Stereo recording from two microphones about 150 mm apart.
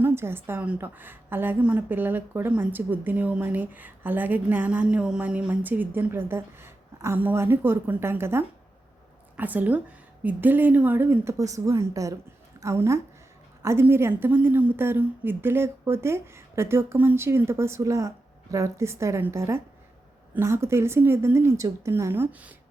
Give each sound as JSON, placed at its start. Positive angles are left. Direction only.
{"t": 0.0, "sound": "a woman's voice", "side_deg": -15}